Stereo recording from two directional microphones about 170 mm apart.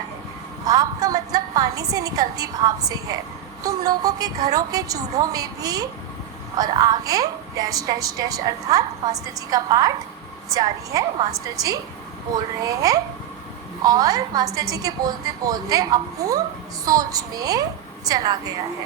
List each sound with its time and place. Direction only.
0.6 s a woman's voice: 20° right (ahead or behind)